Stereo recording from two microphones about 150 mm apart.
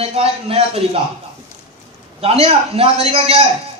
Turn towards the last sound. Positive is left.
turn(degrees=-40)  # may be behind; listen again after turning